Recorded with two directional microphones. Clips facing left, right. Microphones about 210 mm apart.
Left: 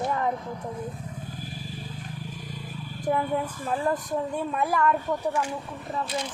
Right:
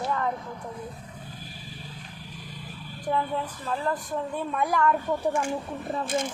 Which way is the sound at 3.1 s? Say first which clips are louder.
Left 2 dB; 15° left (ahead or behind).